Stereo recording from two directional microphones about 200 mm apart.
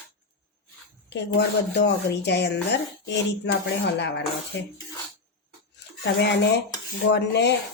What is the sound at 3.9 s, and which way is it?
Speech, 60° left (ahead or behind).